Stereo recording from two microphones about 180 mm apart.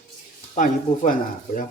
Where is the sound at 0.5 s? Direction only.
45° left (ahead or behind).